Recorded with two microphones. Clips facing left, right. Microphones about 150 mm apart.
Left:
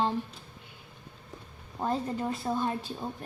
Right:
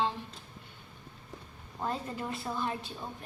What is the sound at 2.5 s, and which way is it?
Speech, 35° left (ahead or behind).